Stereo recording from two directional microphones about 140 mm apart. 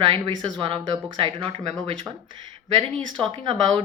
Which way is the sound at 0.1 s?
35° right (ahead or behind).